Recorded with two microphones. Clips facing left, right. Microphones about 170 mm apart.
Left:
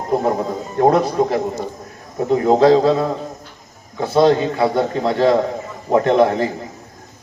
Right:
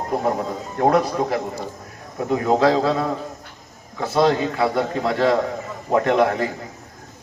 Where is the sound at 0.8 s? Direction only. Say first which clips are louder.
Left 4 dB; 30° left (ahead or behind).